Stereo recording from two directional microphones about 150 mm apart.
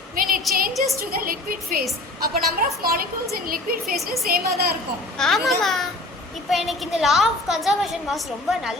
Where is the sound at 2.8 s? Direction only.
75° right (ahead or behind).